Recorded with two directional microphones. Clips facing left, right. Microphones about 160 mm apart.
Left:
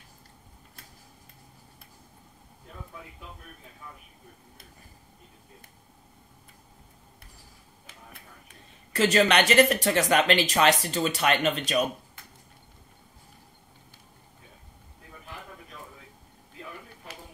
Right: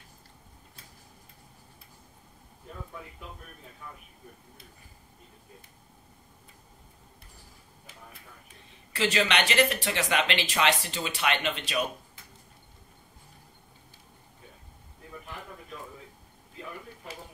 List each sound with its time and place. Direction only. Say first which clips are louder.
8.9 s speech: left 5 dB; 45° left (ahead or behind)